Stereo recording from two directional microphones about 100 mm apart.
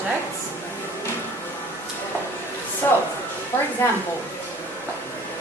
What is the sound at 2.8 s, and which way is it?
Speech, 20° left (ahead or behind).